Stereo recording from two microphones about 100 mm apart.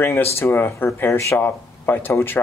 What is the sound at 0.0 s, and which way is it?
Speech, 25° left (ahead or behind).